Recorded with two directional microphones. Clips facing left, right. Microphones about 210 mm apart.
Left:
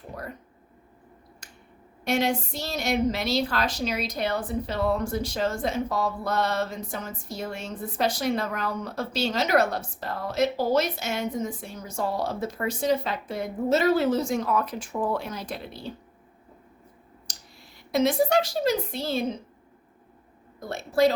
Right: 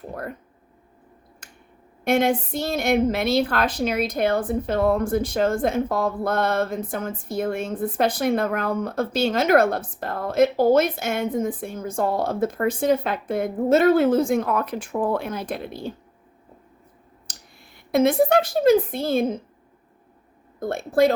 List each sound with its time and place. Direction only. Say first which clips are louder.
1.4 s finger snapping: right 1 dB; 55° right (ahead or behind)
2.0 s a woman's voice: right 5 dB; 55° right (ahead or behind)
17.2 s speech: right 1 dB; 55° right (ahead or behind)
20.6 s a woman's voice: right 3 dB; 55° right (ahead or behind)